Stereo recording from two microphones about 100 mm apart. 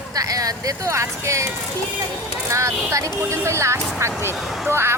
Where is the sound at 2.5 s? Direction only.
30° right (ahead or behind).